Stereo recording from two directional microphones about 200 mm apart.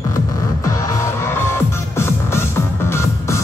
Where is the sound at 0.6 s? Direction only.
15° left (ahead or behind).